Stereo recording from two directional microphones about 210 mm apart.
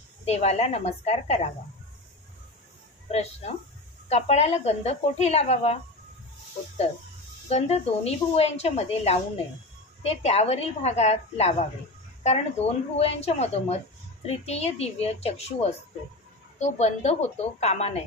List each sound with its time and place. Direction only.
0.2 s speech: 30° left (ahead or behind)
3.1 s speech: 30° left (ahead or behind)
7.4 s a woman's voice: 30° left (ahead or behind)